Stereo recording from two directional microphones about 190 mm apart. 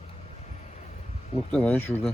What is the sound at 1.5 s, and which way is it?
Speech, 10° left (ahead or behind).